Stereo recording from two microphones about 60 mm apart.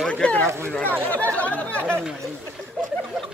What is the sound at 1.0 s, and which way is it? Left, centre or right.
Speech, left.